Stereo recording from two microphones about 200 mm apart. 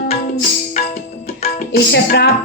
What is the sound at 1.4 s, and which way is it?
Music, 50° left (ahead or behind).